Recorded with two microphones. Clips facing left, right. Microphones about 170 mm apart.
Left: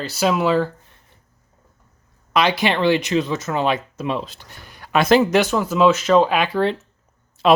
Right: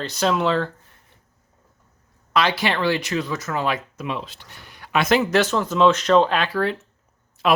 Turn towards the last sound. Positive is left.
turn(degrees=25)  # may be behind; listen again after turning